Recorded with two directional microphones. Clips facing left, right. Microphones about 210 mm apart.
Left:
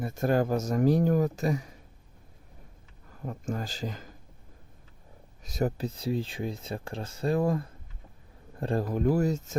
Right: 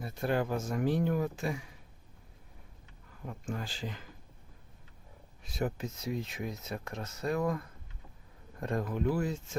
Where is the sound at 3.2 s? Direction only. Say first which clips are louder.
Left 5 dB; 40° left (ahead or behind).